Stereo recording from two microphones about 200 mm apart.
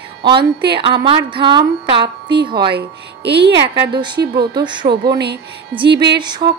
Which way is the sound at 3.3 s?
55° right (ahead or behind).